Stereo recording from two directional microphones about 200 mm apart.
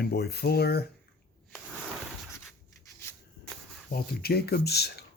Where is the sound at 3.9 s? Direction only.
50° left (ahead or behind).